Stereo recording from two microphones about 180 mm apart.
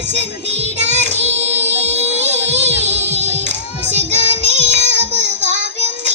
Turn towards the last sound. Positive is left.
turn(degrees=-40)  # may be behind; listen again after turning